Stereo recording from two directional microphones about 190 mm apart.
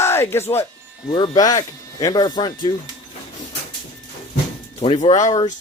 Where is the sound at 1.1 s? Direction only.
25° left (ahead or behind).